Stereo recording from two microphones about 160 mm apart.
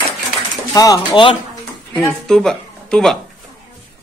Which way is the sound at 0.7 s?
25° left (ahead or behind).